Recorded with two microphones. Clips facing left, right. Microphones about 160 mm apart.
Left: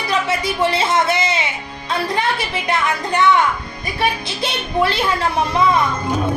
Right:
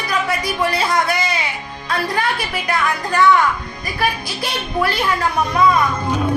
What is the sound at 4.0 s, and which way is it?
Speech, 25° left (ahead or behind).